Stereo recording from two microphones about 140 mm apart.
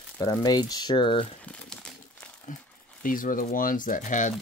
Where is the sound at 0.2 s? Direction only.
30° left (ahead or behind).